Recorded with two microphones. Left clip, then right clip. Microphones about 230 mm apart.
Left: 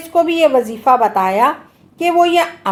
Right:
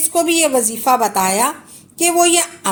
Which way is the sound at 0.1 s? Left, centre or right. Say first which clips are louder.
Left 4 dB; right.